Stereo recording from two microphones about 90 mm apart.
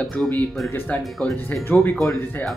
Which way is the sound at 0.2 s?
15° left (ahead or behind).